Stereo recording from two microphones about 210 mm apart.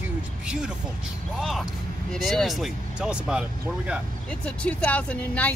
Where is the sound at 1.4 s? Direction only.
Centre (ahead or behind).